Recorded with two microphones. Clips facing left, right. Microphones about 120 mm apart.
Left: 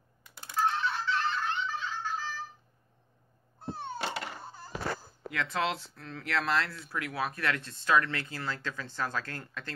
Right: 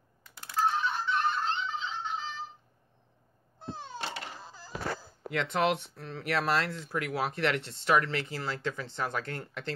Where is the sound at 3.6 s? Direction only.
90° right.